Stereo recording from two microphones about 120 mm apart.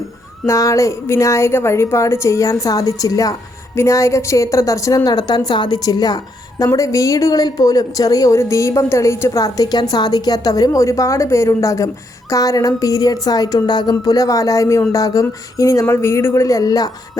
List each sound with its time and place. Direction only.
0.4 s speech: 25° left (ahead or behind)